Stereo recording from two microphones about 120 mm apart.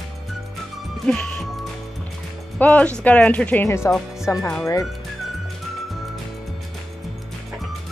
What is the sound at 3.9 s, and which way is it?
Speech, centre (ahead or behind).